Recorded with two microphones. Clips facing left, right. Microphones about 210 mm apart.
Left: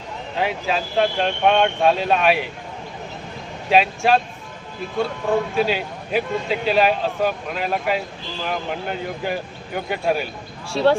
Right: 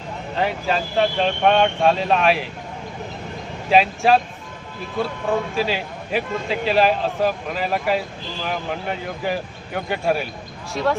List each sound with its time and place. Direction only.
0.3 s a man's voice: centre (ahead or behind)
3.7 s a man's voice: centre (ahead or behind)
10.7 s speech: 30° left (ahead or behind)